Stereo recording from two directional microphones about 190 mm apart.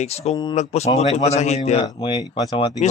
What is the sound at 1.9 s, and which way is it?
Speech, 20° left (ahead or behind).